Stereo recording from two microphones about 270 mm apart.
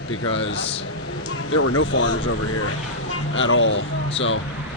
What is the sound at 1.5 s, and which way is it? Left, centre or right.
Speech, left.